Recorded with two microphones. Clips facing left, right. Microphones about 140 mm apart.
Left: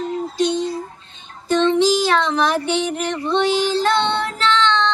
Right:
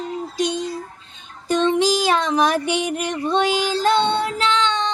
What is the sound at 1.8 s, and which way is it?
A child's voice, 10° right (ahead or behind).